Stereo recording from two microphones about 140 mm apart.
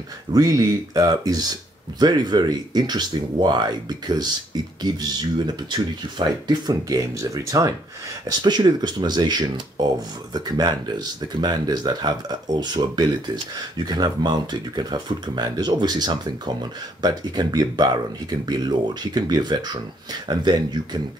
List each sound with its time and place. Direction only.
0.3 s speech: 25° right (ahead or behind)
5.5 s speech: 30° right (ahead or behind)